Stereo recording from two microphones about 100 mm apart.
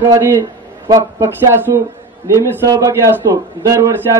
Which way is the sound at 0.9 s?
30° right (ahead or behind).